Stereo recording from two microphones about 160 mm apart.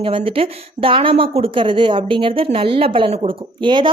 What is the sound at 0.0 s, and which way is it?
Speech, 35° right (ahead or behind).